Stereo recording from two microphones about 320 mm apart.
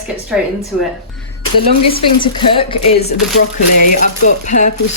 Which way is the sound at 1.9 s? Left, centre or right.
Centre.